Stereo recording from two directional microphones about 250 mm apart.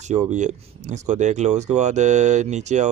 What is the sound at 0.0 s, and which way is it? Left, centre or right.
Speech, right.